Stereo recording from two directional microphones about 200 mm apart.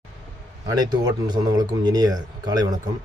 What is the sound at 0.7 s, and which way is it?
Speech, 20° right (ahead or behind).